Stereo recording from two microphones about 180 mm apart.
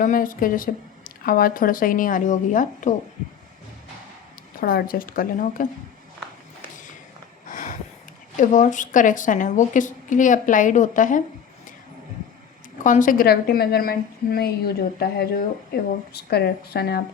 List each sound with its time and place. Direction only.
0.0 s speech: 50° left (ahead or behind)
4.6 s speech: 55° left (ahead or behind)
7.4 s a sound: 45° left (ahead or behind)
8.4 s speech: 45° left (ahead or behind)
12.8 s a woman's voice: 45° left (ahead or behind); by 17.0 s 60° left (ahead or behind)